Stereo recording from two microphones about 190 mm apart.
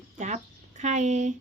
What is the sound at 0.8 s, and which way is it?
Speech, 40° right (ahead or behind).